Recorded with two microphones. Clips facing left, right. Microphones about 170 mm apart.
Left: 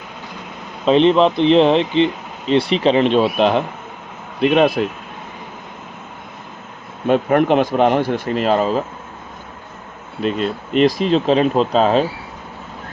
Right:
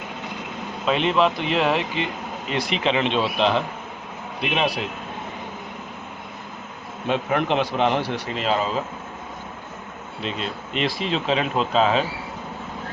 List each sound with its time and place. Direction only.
0.9 s speech: 30° left (ahead or behind); by 4.9 s 50° left (ahead or behind)
7.1 s speech: 50° left (ahead or behind)
10.2 s speech: 50° left (ahead or behind)